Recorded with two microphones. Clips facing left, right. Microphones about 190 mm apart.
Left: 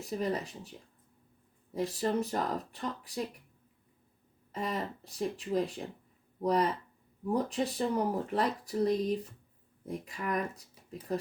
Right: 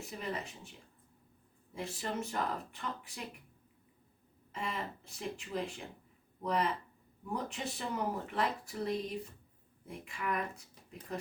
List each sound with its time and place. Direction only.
0.0 s speech: 35° left (ahead or behind)
1.7 s speech: 35° left (ahead or behind)
4.5 s speech: 35° left (ahead or behind)